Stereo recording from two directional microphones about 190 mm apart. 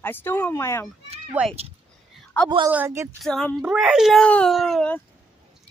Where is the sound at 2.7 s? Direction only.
10° right (ahead or behind).